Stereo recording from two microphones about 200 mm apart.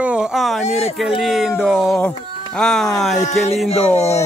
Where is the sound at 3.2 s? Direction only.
35° left (ahead or behind).